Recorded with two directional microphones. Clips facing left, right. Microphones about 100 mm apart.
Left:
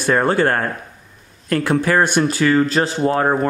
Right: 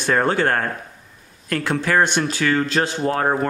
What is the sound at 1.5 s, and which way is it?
Speech, 10° left (ahead or behind).